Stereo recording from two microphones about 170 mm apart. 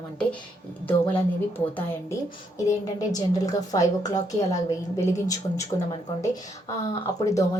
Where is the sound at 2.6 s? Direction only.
20° left (ahead or behind).